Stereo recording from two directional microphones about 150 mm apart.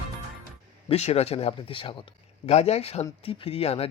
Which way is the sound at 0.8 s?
45° left (ahead or behind).